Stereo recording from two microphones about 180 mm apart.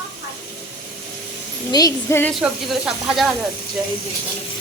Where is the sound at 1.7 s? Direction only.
20° left (ahead or behind).